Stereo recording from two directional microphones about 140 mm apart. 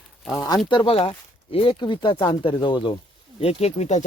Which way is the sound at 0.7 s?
40° left (ahead or behind).